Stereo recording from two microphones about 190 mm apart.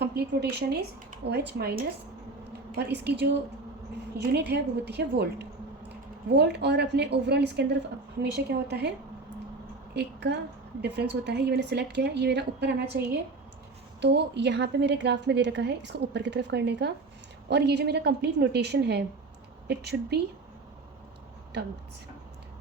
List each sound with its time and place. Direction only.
0.0 s a woman's voice: 60° right (ahead or behind)
4.2 s a woman's voice: 60° right (ahead or behind)
9.9 s a woman's voice: 60° right (ahead or behind)
14.0 s a woman's voice: 65° right (ahead or behind)
21.5 s a woman's voice: 60° right (ahead or behind)